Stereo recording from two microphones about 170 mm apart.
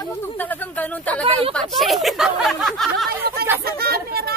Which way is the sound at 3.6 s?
65° right (ahead or behind).